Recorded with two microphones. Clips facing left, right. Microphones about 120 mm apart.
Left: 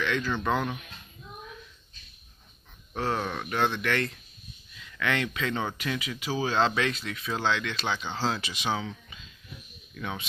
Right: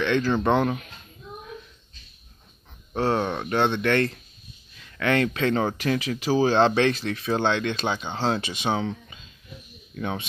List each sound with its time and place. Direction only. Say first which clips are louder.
0.0 s speech: right 6 dB; 30° right (ahead or behind)
2.9 s speech: right 6 dB; 30° right (ahead or behind)
4.7 s a sound: right 1 dB; 45° right (ahead or behind)
5.1 s speech: right 9 dB; 45° right (ahead or behind)
5.4 s speech: right 7 dB; 35° right (ahead or behind)
9.9 s speech: right 6 dB; 30° right (ahead or behind)